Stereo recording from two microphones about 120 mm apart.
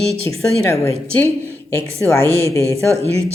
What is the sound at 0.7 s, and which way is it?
A woman's voice, 20° left (ahead or behind).